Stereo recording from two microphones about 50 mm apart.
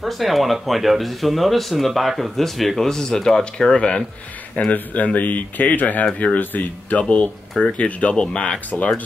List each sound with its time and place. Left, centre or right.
0.0 s speech: centre
4.6 s speech: left
7.0 s speech: left